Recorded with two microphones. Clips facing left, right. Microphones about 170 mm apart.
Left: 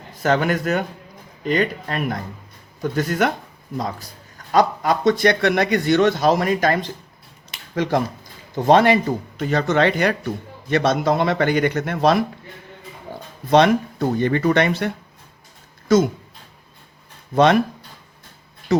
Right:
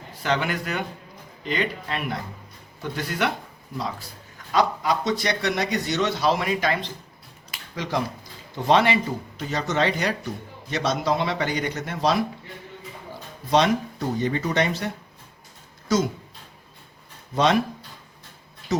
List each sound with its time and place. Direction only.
0.2 s a man's voice: 45° left (ahead or behind)
4.5 s a man's voice: 50° left (ahead or behind)
13.1 s a sound: 55° left (ahead or behind)
13.5 s speech: 55° left (ahead or behind)
15.9 s speech: 55° left (ahead or behind)
17.3 s speech: 55° left (ahead or behind)
18.7 s speech: 60° left (ahead or behind)